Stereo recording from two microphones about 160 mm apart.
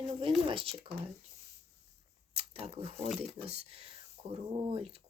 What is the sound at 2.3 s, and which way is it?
Speech, 40° right (ahead or behind).